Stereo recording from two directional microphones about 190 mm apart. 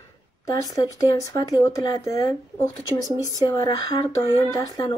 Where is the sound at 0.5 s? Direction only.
20° left (ahead or behind).